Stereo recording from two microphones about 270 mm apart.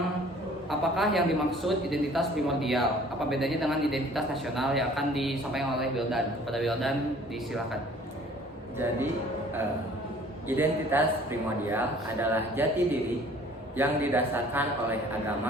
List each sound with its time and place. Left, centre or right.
0.7 s a man's voice: centre
10.5 s a man's voice: centre